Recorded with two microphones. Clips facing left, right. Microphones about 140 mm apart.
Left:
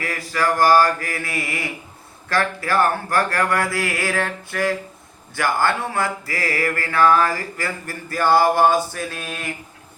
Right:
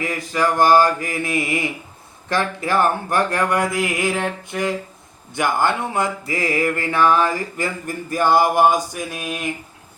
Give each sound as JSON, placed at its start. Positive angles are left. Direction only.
{"t": 0.0, "sound": "mantra", "side_deg": -20}